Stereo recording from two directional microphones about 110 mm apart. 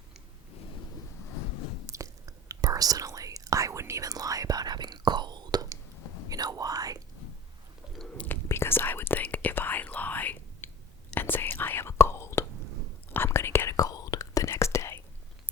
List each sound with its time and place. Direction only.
1.9 s whispering: 30° right (ahead or behind)
7.9 s whispering: 5° left (ahead or behind)
8.3 s whispering: 20° left (ahead or behind)